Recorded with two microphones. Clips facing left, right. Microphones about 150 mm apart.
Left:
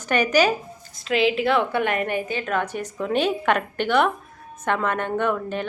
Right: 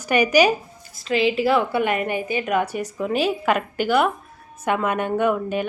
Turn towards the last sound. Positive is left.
turn(degrees=-10)  # may be behind; listen again after turning